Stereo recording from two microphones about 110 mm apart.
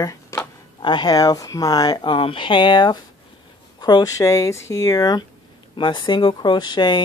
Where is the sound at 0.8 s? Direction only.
40° left (ahead or behind).